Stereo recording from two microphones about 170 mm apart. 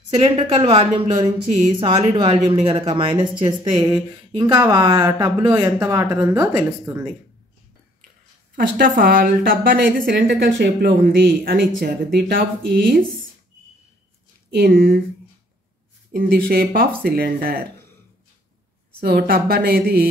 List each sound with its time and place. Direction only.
0.1 s a woman's voice: 30° right (ahead or behind)
3.8 s speech: 15° right (ahead or behind)
8.5 s a woman's voice: 55° right (ahead or behind)
14.5 s a woman's voice: 60° right (ahead or behind)
16.1 s a woman's voice: 60° right (ahead or behind)
18.9 s a woman's voice: 65° right (ahead or behind)